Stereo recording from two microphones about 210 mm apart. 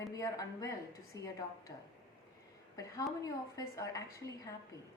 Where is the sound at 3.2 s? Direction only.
15° left (ahead or behind).